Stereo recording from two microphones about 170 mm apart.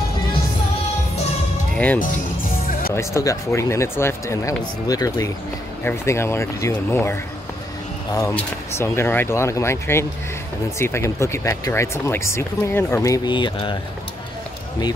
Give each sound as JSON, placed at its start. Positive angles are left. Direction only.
{"t": 2.9, "sound": "speech", "side_deg": 15}